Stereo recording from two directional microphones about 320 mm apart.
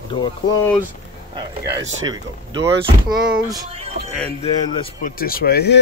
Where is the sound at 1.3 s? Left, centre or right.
Centre.